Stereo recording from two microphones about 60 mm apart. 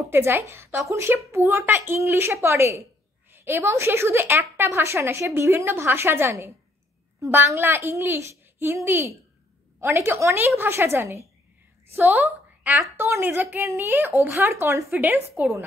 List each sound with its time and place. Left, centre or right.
0.1 s a woman's voice: right
3.3 s a sound: right
3.7 s a woman's voice: right
12.9 s speech: right
14.5 s a woman's voice: right
14.9 s a woman's voice: right